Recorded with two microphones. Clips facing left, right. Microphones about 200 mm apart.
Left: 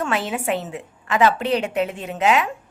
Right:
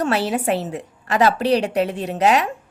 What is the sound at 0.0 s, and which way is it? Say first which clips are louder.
A woman's voice: right 4 dB; 35° right (ahead or behind).